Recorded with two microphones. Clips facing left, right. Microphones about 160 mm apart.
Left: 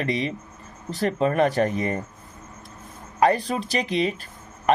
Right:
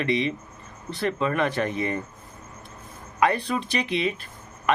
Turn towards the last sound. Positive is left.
turn(degrees=35)  # may be behind; listen again after turning